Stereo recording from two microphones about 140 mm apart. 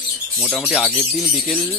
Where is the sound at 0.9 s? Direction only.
10° right (ahead or behind).